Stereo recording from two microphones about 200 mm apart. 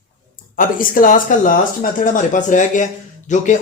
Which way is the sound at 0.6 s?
45° left (ahead or behind).